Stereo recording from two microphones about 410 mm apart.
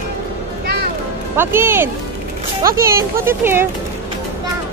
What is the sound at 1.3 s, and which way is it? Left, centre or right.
Speech, centre.